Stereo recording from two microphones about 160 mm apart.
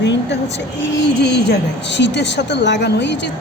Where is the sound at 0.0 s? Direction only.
90° left.